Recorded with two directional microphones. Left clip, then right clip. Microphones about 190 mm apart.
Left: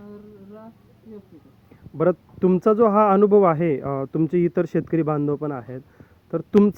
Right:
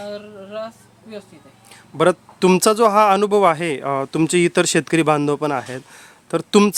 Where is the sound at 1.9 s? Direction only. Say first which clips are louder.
Right 5 dB; 20° right (ahead or behind).